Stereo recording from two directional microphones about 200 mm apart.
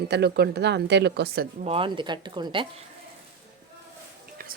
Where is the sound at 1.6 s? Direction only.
25° right (ahead or behind).